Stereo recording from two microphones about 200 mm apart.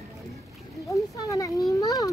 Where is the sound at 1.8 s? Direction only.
15° left (ahead or behind).